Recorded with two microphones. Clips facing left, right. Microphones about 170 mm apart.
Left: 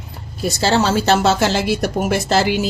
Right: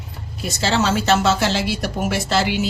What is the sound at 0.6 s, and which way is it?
Speech, 35° left (ahead or behind).